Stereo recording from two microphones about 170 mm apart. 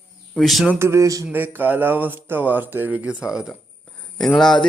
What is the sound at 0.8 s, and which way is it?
Speech, 15° right (ahead or behind).